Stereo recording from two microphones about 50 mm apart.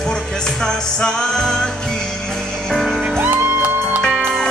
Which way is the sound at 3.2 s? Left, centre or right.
Right.